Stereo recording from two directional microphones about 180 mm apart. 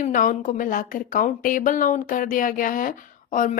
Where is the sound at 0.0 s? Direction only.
45° left (ahead or behind).